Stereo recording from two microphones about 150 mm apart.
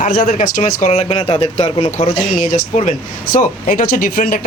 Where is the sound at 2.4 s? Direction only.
55° left (ahead or behind).